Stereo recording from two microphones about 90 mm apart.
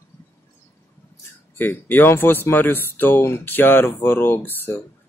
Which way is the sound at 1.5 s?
20° left (ahead or behind).